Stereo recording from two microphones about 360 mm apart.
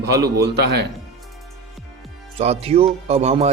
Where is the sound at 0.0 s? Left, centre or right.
Right.